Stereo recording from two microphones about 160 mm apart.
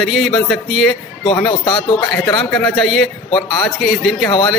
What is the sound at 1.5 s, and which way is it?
Speech, 30° left (ahead or behind).